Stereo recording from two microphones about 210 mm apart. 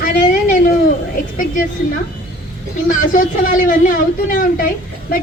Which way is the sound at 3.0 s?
40° left (ahead or behind).